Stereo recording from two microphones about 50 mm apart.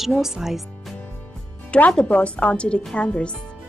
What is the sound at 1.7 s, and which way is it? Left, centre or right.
A woman's voice, left.